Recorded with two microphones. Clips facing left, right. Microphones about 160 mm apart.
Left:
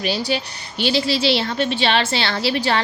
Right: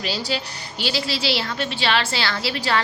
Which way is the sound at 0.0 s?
20° left (ahead or behind).